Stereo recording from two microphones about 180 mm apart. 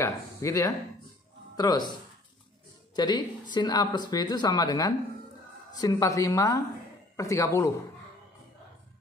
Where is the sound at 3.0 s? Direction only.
25° left (ahead or behind).